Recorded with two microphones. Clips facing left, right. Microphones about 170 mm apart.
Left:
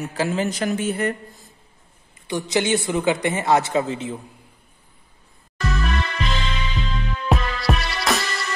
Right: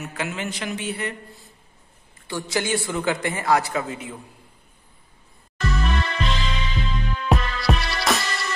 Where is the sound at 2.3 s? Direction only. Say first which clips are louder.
Left 4 dB; 20° left (ahead or behind).